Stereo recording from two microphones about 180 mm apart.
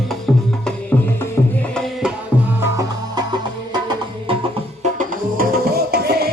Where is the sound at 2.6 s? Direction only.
20° right (ahead or behind).